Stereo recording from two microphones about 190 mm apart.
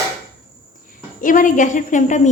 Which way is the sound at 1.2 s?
45° left (ahead or behind).